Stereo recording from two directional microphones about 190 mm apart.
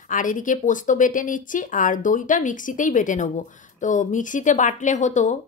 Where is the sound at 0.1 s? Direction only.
45° left (ahead or behind).